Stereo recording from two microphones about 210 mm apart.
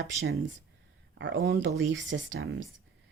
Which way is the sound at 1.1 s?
60° right (ahead or behind).